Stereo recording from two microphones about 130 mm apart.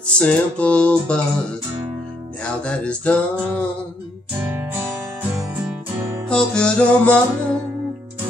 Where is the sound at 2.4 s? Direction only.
5° left (ahead or behind).